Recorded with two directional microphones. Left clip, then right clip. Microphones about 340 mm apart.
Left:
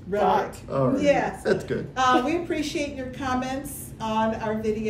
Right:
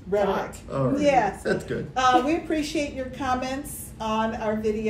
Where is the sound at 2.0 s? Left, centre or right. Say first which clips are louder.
Right 1 dB; centre.